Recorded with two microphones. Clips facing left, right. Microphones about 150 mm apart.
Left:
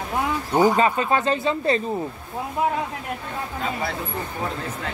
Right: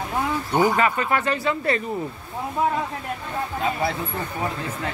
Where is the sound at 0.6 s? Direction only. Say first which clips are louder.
Left 2 dB; 25° left (ahead or behind).